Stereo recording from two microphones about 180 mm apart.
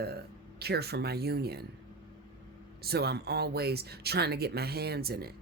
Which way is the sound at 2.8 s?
60° right (ahead or behind).